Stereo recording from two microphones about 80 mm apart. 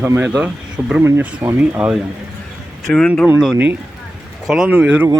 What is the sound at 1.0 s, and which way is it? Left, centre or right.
Speech, right.